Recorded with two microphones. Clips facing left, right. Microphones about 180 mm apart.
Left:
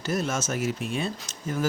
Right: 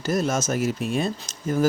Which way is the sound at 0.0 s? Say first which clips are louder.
Right 4 dB; 40° right (ahead or behind).